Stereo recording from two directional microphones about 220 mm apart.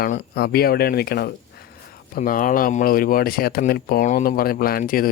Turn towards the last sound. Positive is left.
turn(degrees=40)  # may be behind; listen again after turning